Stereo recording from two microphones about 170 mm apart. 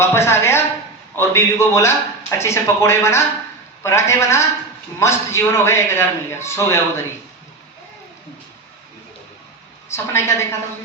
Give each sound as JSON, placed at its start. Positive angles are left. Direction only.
{"t": 0.0, "sound": "a woman's voice", "side_deg": 15}
{"t": 9.9, "sound": "a man's voice", "side_deg": 15}